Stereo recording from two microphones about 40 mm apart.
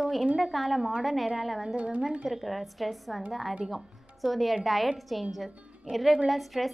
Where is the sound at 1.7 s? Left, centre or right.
Right.